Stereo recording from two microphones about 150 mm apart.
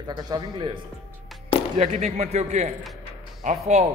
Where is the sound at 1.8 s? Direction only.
50° right (ahead or behind).